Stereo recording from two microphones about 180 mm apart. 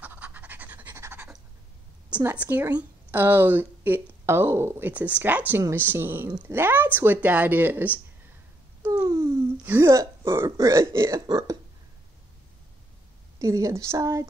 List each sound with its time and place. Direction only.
0.0 s pant: 10° right (ahead or behind)
2.2 s a woman's voice: 10° right (ahead or behind)
13.4 s a woman's voice: 15° right (ahead or behind)